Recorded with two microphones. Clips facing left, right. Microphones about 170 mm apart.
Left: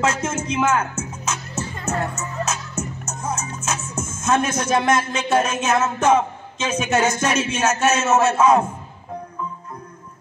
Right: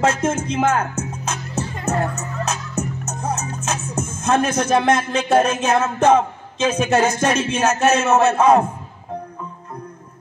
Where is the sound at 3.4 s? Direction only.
60° right (ahead or behind).